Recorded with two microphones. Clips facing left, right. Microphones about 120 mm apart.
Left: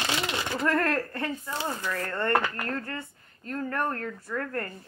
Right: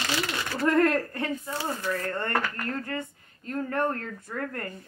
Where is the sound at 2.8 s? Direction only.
15° right (ahead or behind).